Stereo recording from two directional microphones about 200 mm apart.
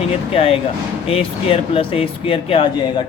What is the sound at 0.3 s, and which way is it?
Speech, 30° left (ahead or behind).